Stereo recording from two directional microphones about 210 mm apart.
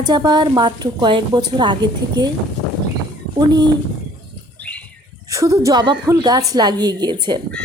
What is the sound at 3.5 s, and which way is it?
Speech, 20° right (ahead or behind).